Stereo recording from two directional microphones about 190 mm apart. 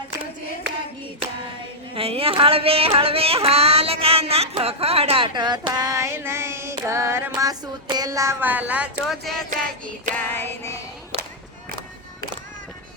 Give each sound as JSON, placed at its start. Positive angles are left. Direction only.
{"t": 2.0, "sound": "yodeling", "side_deg": -30}
{"t": 9.5, "sound": "music", "side_deg": -45}
{"t": 10.2, "sound": "female singing", "side_deg": 10}